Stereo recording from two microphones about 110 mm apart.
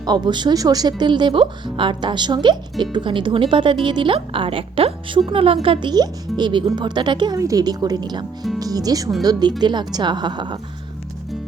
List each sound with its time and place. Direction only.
0.0 s speech: 40° right (ahead or behind); by 5.9 s 55° right (ahead or behind)
5.9 s speech: 40° right (ahead or behind)